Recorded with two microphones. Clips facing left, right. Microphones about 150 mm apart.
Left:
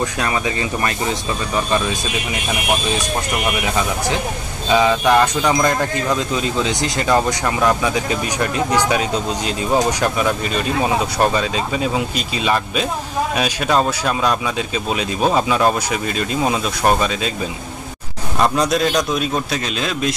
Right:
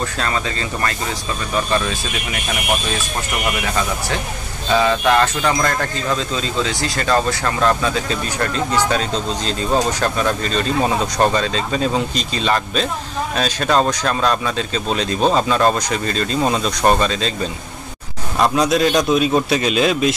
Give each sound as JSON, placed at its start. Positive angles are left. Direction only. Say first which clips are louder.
{"t": 0.2, "sound": "speech", "louder": "left 2 dB", "side_deg": 15}
{"t": 4.6, "sound": "speech", "louder": "left 1 dB", "side_deg": 15}
{"t": 18.4, "sound": "a man's voice", "louder": "right 1 dB", "side_deg": 0}